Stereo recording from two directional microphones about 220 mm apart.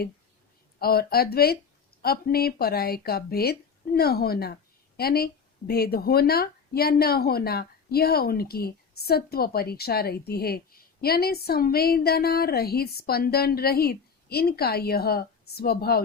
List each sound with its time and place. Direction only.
0.8 s speech: 45° left (ahead or behind)